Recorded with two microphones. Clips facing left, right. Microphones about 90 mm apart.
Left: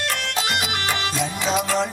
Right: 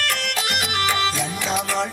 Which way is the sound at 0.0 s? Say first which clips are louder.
Even; 20° left (ahead or behind).